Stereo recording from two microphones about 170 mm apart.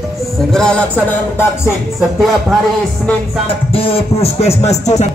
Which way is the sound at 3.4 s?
35° left (ahead or behind).